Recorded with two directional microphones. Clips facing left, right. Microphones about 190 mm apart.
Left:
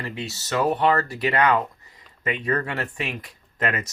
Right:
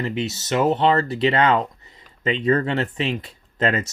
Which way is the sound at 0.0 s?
25° right (ahead or behind).